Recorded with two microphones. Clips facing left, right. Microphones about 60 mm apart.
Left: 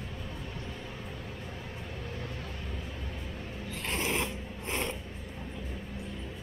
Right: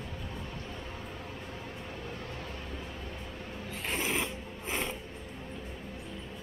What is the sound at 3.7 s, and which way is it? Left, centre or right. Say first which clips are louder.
Pulleys: even; centre.